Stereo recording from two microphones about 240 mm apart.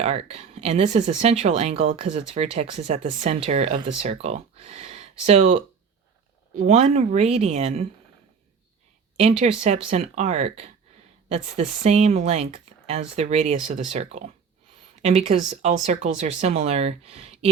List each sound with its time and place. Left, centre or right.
0.0 s speech: right
9.4 s speech: right